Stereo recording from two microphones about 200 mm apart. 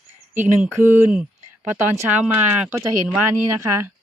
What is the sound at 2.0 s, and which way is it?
Speech, 10° right (ahead or behind).